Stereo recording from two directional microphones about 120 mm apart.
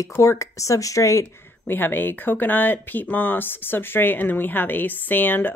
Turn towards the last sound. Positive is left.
turn(degrees=15)  # may be behind; listen again after turning